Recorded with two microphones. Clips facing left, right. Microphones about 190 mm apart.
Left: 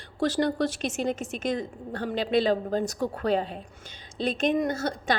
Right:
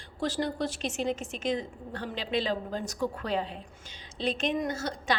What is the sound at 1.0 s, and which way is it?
A woman's voice, 40° left (ahead or behind).